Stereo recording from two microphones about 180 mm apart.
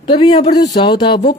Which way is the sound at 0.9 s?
65° left (ahead or behind).